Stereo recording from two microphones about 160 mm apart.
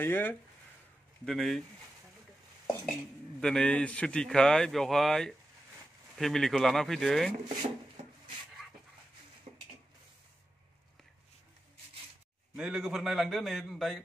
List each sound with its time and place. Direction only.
0.0 s a man's voice: 15° left (ahead or behind)
3.3 s a man's voice: 5° left (ahead or behind)
9.5 s a sound: 45° right (ahead or behind)
12.5 s a man's voice: 5° right (ahead or behind)